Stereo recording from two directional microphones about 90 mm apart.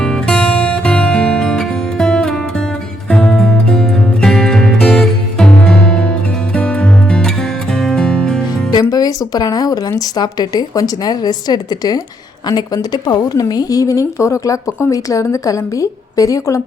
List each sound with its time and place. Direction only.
0.0 s music: 10° left (ahead or behind)
8.9 s a woman's voice: 45° left (ahead or behind)